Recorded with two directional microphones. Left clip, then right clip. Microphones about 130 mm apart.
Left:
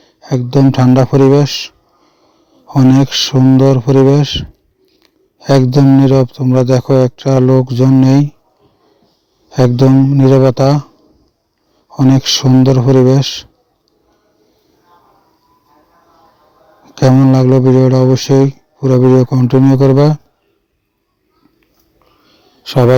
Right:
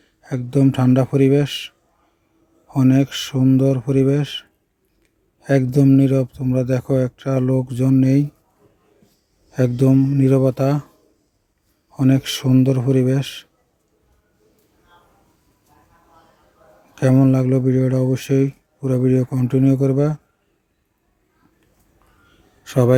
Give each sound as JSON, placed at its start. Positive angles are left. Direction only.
{"t": 0.0, "sound": "a man's voice", "side_deg": 40}
{"t": 9.5, "sound": "a man's voice", "side_deg": 45}
{"t": 11.9, "sound": "a man's voice", "side_deg": 40}
{"t": 16.9, "sound": "a man's voice", "side_deg": 45}
{"t": 22.6, "sound": "a man's voice", "side_deg": 40}